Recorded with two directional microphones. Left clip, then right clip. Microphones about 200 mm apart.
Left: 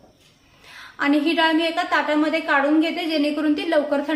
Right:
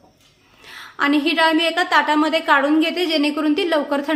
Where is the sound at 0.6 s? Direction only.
45° right (ahead or behind).